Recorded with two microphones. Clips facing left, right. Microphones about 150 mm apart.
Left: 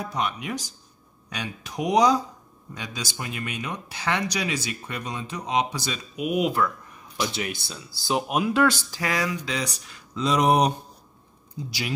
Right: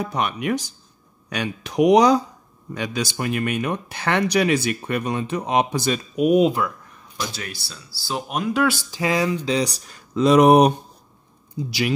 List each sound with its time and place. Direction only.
0.0 s speech: 65° right (ahead or behind); by 6.5 s 40° right (ahead or behind)
7.3 s speech: 20° left (ahead or behind)
8.3 s speech: 5° left (ahead or behind)
8.9 s speech: 25° right (ahead or behind); by 10.7 s 60° right (ahead or behind)